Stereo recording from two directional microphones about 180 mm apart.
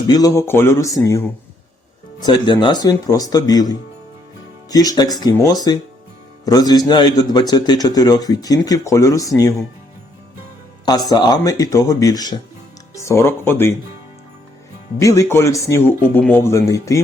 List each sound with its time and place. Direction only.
0.1 s a man's voice: 20° left (ahead or behind)
10.8 s a man's voice: 20° left (ahead or behind)
14.9 s speech: 15° left (ahead or behind)